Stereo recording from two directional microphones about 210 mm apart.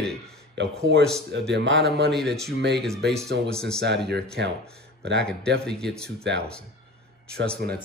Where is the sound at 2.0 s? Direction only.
Centre (ahead or behind).